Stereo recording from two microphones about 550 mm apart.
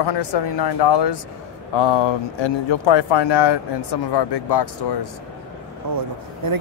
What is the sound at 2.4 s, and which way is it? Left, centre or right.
Speech, left.